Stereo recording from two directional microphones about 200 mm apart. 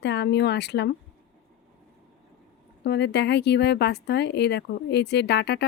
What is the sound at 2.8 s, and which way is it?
Speech, 55° left (ahead or behind).